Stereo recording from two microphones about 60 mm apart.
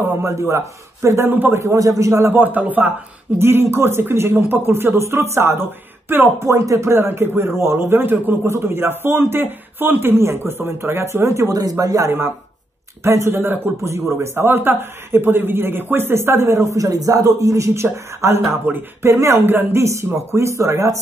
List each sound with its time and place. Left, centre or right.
0.2 s a man's voice: right
1.3 s speech: right
1.8 s a man's voice: right
2.3 s speech: right
3.3 s a man's voice: right
6.5 s a man's voice: right
6.9 s a man's voice: right
11.4 s speech: right
13.0 s a man's voice: right
19.4 s speech: right
19.8 s a man's voice: right